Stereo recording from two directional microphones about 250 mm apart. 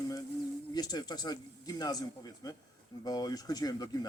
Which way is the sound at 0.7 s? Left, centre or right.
Centre.